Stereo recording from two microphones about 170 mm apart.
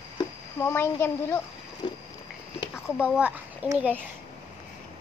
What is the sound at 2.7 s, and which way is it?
A child's voice, 5° right (ahead or behind).